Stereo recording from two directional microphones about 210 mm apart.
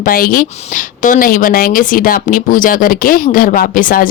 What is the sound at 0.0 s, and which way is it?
A woman's voice, 45° left (ahead or behind).